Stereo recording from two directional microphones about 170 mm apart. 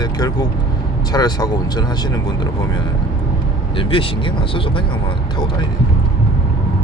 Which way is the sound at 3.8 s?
30° left (ahead or behind).